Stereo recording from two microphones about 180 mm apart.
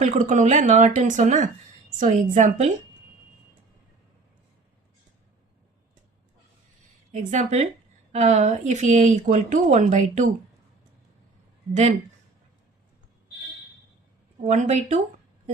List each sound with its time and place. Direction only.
0.0 s speech: 45° right (ahead or behind)
7.1 s speech: 40° right (ahead or behind)
11.7 s speech: 45° right (ahead or behind)
14.4 s speech: 40° right (ahead or behind)